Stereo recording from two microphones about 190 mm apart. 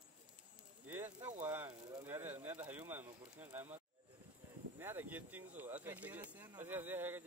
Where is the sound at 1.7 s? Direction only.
20° right (ahead or behind).